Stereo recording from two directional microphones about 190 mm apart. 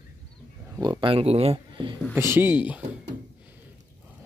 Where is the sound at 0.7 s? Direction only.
25° right (ahead or behind).